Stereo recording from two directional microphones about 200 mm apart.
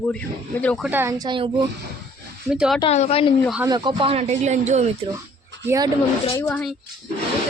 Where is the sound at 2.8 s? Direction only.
30° left (ahead or behind).